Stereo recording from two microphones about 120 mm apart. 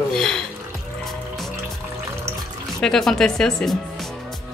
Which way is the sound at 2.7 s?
5° left (ahead or behind).